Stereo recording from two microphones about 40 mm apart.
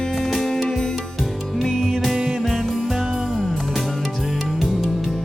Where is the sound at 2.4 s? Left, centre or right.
Centre.